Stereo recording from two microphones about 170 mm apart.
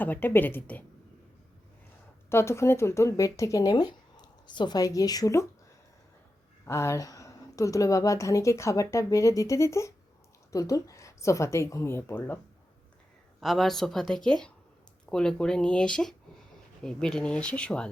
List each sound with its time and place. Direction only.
0.0 s speech: 10° left (ahead or behind)
2.3 s speech: 15° left (ahead or behind)
6.7 s speech: 15° left (ahead or behind)
13.4 s a woman's voice: centre (ahead or behind)